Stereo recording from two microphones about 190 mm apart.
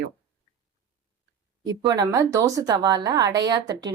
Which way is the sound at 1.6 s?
20° right (ahead or behind).